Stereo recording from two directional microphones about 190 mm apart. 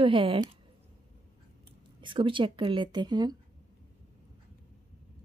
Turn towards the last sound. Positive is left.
turn(degrees=-20)  # may be behind; listen again after turning